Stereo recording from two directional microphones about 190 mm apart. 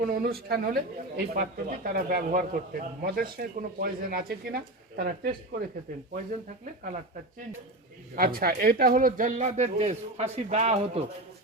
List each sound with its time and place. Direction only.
0.0 s speech: 50° right (ahead or behind)
8.1 s speech: 50° right (ahead or behind); by 11.0 s 35° right (ahead or behind)